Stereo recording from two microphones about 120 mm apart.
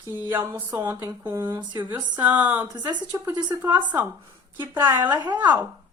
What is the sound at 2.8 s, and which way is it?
Speech, 35° right (ahead or behind).